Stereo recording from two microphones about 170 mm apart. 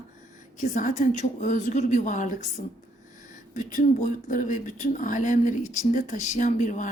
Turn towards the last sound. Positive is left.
turn(degrees=45)  # may be behind; listen again after turning